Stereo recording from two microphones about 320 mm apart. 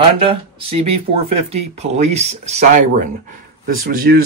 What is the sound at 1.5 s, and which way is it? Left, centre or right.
Speech, centre.